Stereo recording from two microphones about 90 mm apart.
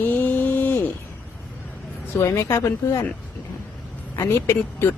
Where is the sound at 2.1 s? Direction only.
30° left (ahead or behind).